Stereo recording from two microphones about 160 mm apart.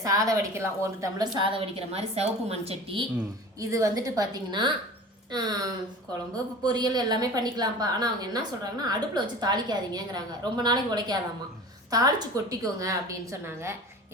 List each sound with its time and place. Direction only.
0.0 s a woman's voice: 20° right (ahead or behind)
1.4 s a woman's voice: 35° right (ahead or behind)
3.6 s a woman's voice: 20° right (ahead or behind)